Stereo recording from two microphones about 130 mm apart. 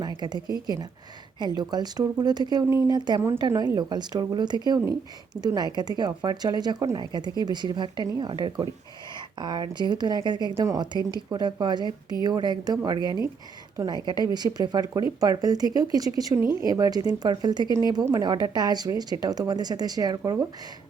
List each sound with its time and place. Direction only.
0.2 s speech: 35° right (ahead or behind)